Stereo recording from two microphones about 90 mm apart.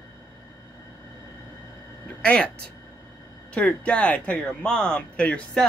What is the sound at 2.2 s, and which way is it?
Speech, 15° left (ahead or behind).